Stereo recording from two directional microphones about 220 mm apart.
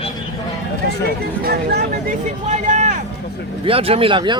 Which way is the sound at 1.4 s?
40° right (ahead or behind).